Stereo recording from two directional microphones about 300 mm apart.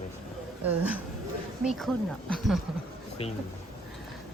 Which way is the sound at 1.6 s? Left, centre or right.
Centre.